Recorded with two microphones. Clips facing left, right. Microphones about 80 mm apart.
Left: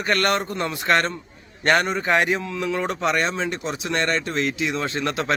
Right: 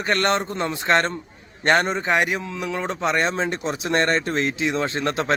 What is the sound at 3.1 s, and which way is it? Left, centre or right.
Speech, right.